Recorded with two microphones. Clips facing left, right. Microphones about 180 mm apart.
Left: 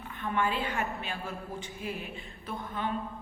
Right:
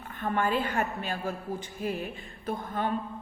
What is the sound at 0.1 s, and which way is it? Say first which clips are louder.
A woman's voice: right 3 dB; 45° right (ahead or behind).